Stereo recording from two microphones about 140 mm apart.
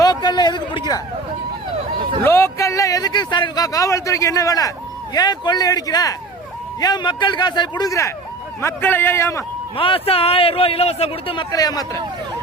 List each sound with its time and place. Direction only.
0.0 s a man's voice: 30° left (ahead or behind)
2.2 s a man's voice: 20° left (ahead or behind)
9.7 s a man's voice: 40° left (ahead or behind)
11.5 s speech: 25° left (ahead or behind)